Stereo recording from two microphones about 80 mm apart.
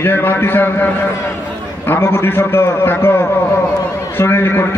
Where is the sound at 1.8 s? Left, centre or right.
Left.